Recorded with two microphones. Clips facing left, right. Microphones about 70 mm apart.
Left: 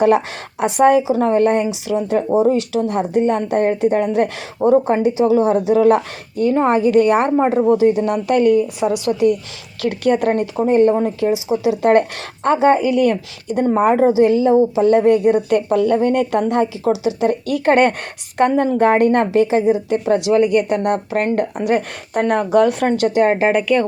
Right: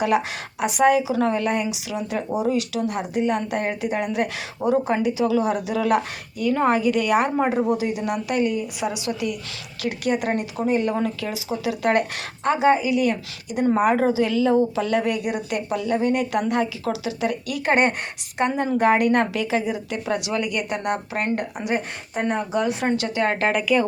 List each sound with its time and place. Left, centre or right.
0.8 s a woman's voice: left
11.3 s speech: left
12.5 s a woman's voice: left
15.4 s a woman's voice: left
21.3 s a woman's voice: left
23.0 s speech: left
23.5 s speech: centre